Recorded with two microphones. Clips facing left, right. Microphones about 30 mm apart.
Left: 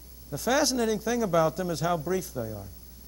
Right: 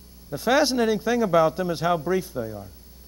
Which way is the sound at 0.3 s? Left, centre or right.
Right.